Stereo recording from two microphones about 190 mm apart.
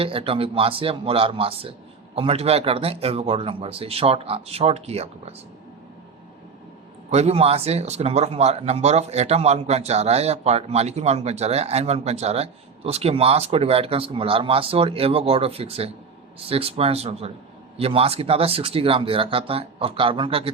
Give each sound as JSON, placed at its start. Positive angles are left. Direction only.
{"t": 0.0, "sound": "speech", "side_deg": -30}
{"t": 7.1, "sound": "speech", "side_deg": -35}